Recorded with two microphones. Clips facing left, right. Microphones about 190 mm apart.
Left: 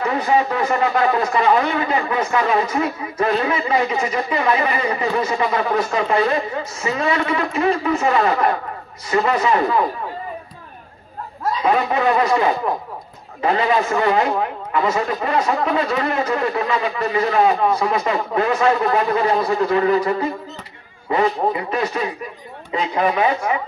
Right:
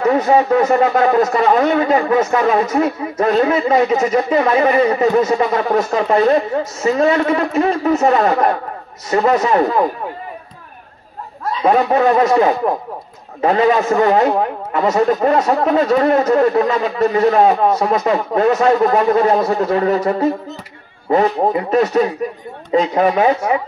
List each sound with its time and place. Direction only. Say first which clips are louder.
0.0 s a man's voice: right 5 dB; 40° right (ahead or behind)
11.6 s a man's voice: right 5 dB; 40° right (ahead or behind)